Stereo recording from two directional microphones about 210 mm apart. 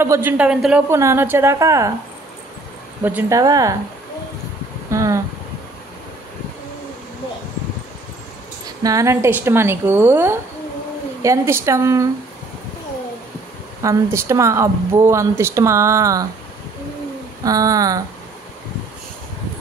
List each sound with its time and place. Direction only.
0.0 s speech: 10° right (ahead or behind)
3.0 s speech: 10° right (ahead or behind)
4.9 s a sound: 15° right (ahead or behind)
8.6 s speech: 15° right (ahead or behind)
13.8 s speech: 10° right (ahead or behind)
17.4 s speech: 15° right (ahead or behind)